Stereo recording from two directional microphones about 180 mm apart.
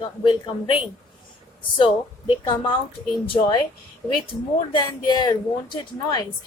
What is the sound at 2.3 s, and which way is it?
A woman's voice, 25° left (ahead or behind).